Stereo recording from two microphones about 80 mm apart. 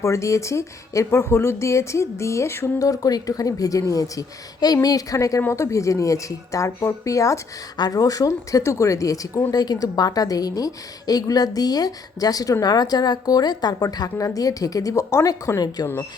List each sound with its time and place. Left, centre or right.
0.0 s speech: left
5.4 s speech: left
7.8 s a woman's voice: left